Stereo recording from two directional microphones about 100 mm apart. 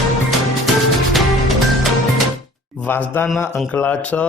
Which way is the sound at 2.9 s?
20° left (ahead or behind).